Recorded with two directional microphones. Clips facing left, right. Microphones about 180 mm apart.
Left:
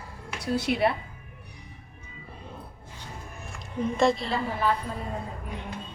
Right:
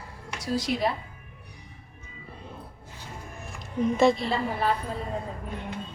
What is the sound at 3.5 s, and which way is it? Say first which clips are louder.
Speech: right 3 dB; centre (ahead or behind).